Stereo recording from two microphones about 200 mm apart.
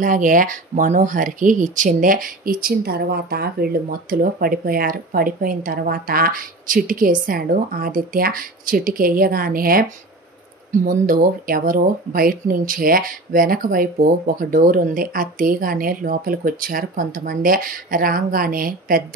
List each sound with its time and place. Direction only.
0.0 s speech: 40° right (ahead or behind)
10.9 s speech: 45° right (ahead or behind)